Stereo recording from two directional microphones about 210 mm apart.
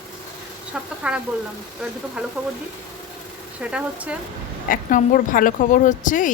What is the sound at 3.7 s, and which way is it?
Speech, 5° right (ahead or behind).